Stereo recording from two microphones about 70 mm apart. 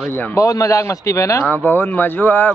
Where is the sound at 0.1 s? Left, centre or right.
Left.